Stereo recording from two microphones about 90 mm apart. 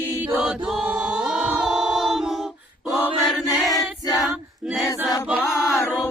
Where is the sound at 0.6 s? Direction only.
5° right (ahead or behind).